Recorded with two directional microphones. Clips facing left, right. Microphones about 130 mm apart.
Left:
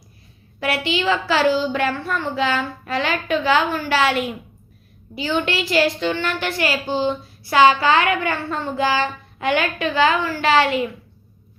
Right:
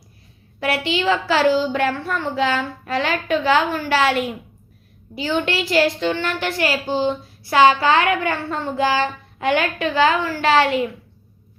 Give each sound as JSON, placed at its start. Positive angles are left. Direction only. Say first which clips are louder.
{"t": 0.6, "sound": "a woman's voice", "louder": "right 1 dB", "side_deg": -45}